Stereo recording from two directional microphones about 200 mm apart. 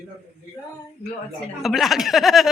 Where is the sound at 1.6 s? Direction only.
Centre (ahead or behind).